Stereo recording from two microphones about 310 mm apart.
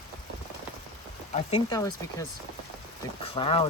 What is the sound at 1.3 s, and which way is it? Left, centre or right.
Speech, centre.